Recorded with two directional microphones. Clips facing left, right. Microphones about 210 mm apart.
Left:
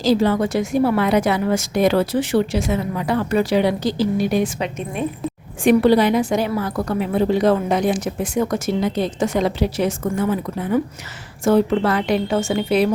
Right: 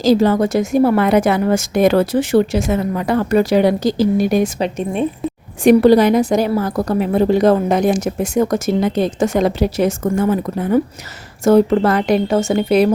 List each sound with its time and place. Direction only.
0.0 s a woman's voice: 45° right (ahead or behind)